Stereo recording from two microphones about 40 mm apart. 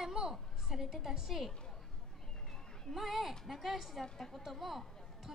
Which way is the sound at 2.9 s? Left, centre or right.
Centre.